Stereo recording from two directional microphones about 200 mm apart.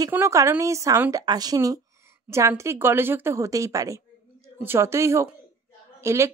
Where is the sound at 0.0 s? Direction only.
15° right (ahead or behind).